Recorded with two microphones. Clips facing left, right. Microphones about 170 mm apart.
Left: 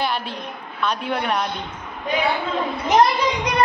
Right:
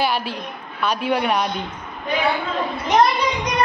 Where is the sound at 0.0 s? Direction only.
5° right (ahead or behind).